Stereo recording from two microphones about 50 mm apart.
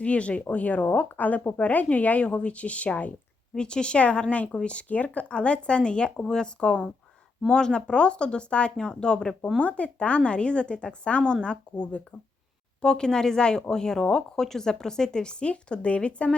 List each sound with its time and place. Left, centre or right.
0.0 s a woman's voice: left
3.5 s speech: centre